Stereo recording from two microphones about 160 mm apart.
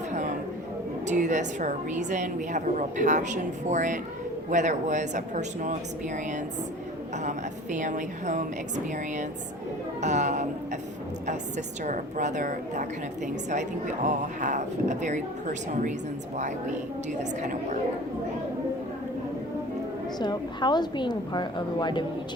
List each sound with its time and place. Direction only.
1.0 s a woman's voice: 50° right (ahead or behind)
7.2 s a woman's voice: 50° right (ahead or behind)
10.0 s a woman's voice: 45° right (ahead or behind)
17.4 s a woman's voice: 50° right (ahead or behind)
20.1 s a woman's voice: 25° left (ahead or behind)